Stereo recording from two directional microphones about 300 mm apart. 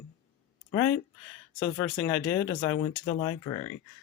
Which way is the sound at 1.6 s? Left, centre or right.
Centre.